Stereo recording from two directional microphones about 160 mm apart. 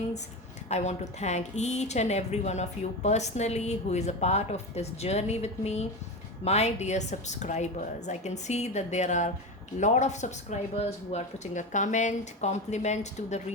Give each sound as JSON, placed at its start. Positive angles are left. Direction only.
{"t": 0.7, "sound": "speech", "side_deg": 45}